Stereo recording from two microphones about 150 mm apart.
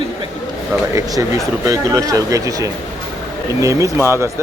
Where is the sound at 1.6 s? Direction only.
20° right (ahead or behind).